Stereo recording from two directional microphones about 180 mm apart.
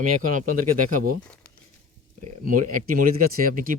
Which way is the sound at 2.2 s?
50° right (ahead or behind).